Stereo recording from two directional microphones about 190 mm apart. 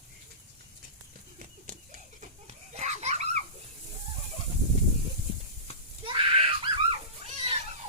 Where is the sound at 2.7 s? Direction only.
35° right (ahead or behind).